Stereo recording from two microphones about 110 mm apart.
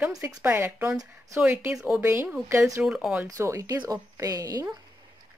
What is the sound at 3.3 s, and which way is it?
Speech, 25° right (ahead or behind).